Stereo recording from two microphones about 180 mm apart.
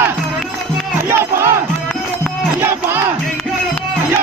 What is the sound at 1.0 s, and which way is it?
Battle cry, 15° right (ahead or behind).